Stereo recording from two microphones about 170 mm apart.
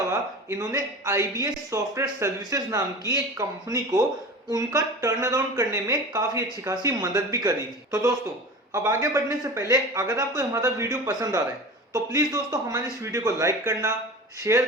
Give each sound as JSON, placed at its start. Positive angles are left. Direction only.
{"t": 0.1, "sound": "speech", "side_deg": -20}